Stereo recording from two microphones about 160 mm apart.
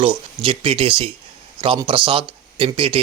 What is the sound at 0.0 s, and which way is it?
Speech, 35° right (ahead or behind).